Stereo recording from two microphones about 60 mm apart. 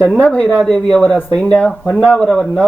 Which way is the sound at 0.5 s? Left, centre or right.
Centre.